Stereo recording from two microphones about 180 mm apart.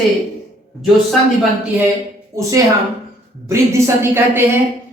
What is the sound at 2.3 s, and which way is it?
A woman's voice, 20° right (ahead or behind).